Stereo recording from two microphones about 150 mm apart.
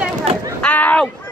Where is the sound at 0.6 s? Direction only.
10° left (ahead or behind).